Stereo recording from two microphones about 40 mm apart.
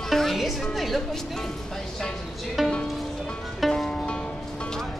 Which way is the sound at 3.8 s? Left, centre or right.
Left.